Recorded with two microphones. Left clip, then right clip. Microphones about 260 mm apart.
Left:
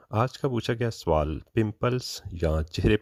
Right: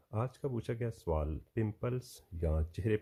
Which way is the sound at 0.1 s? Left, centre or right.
Left.